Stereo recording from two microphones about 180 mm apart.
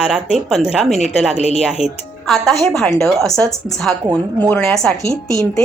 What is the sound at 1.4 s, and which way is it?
Speech, 35° left (ahead or behind).